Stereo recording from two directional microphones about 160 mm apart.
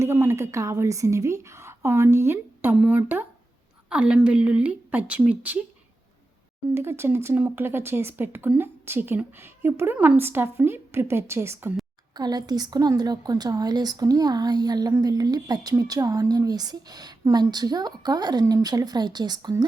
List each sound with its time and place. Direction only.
0.0 s speech: 15° right (ahead or behind)
6.7 s a woman's voice: 15° right (ahead or behind)